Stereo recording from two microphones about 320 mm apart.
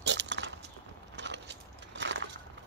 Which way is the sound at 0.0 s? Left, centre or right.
Right.